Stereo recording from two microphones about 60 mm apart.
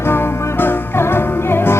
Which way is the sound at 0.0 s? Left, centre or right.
Left.